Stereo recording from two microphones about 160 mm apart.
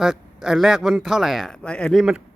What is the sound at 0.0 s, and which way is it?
Speech, 5° right (ahead or behind).